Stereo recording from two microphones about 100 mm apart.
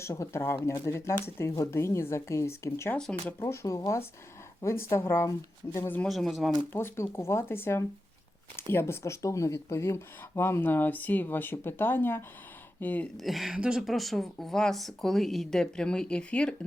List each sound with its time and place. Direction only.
0.0 s speech: 30° left (ahead or behind)
3.0 s speech: 10° left (ahead or behind)
3.5 s speech: 30° left (ahead or behind)
6.1 s a woman's voice: centre (ahead or behind)
6.7 s speech: 25° left (ahead or behind)
13.1 s a woman's voice: centre (ahead or behind)